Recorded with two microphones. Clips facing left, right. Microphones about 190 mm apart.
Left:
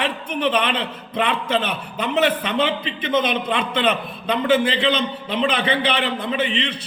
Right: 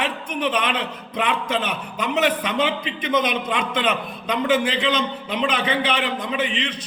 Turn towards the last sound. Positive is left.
turn(degrees=-10)  # may be behind; listen again after turning